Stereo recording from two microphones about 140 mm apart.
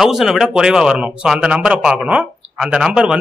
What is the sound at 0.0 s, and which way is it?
Speech, centre (ahead or behind).